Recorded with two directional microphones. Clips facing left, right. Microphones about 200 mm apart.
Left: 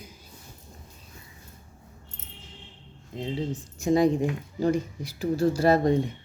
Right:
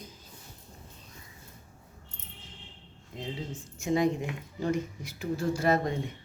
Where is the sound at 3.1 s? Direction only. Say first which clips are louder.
Left 6 dB; 20° left (ahead or behind).